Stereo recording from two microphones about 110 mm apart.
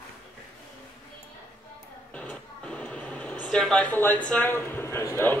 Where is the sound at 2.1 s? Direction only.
15° left (ahead or behind).